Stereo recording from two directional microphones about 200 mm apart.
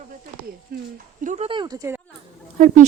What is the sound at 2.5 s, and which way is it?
Speech, 40° right (ahead or behind).